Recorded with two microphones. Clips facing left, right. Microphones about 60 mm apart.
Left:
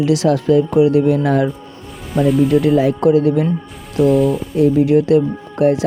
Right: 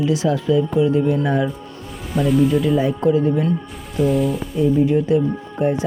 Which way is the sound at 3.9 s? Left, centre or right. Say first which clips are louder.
Left 5 dB; centre.